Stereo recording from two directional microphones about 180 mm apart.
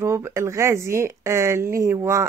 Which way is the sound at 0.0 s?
15° right (ahead or behind).